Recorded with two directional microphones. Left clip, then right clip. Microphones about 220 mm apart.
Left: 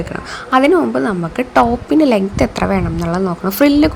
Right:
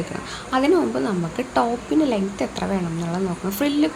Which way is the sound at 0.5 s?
25° left (ahead or behind).